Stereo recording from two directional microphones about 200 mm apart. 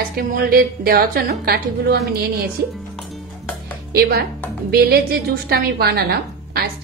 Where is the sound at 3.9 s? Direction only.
55° right (ahead or behind).